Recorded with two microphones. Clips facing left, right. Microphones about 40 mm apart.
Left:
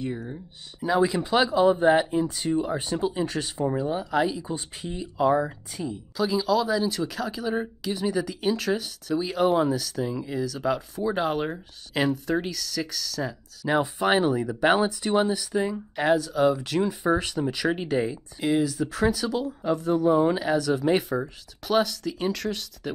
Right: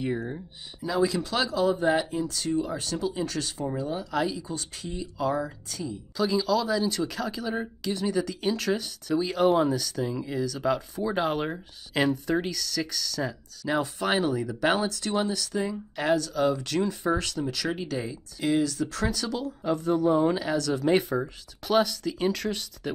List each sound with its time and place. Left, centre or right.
0.0 s speech: centre
0.8 s speech: left
6.1 s speech: centre
13.7 s speech: centre
18.4 s speech: centre